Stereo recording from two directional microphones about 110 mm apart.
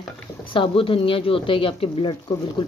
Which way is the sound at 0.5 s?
50° left (ahead or behind).